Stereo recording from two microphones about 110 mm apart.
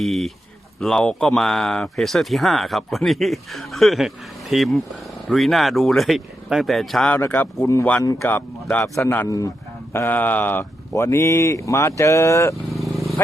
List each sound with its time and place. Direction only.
0.0 s speech: centre (ahead or behind)
7.1 s speech: 20° left (ahead or behind)
12.8 s vehicle: centre (ahead or behind)